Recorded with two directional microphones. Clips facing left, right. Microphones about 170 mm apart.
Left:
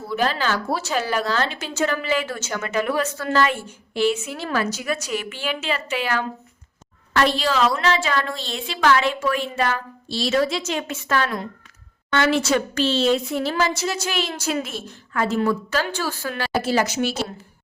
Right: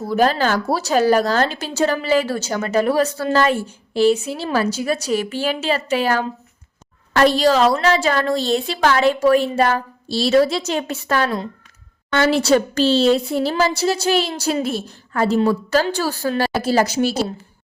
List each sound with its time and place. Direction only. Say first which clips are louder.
0.0 s a woman's voice: right 6 dB; 40° right (ahead or behind)